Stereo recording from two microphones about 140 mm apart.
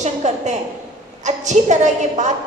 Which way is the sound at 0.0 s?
55° right (ahead or behind).